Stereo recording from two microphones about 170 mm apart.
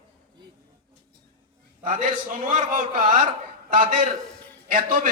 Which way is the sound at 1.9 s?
50° right (ahead or behind).